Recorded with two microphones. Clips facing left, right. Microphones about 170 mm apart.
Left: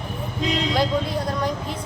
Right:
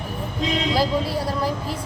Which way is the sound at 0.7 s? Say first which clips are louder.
Right 1 dB; 5° right (ahead or behind).